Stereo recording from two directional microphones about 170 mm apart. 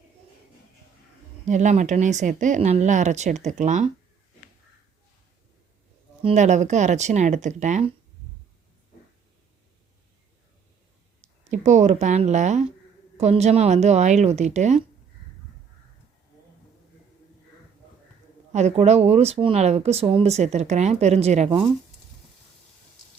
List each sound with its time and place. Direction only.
1.5 s speech: 45° right (ahead or behind)
6.2 s speech: 45° right (ahead or behind)
11.2 s speech: 45° right (ahead or behind)
18.5 s speech: 40° right (ahead or behind)